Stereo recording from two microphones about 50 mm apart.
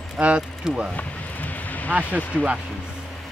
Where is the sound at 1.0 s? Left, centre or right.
Left.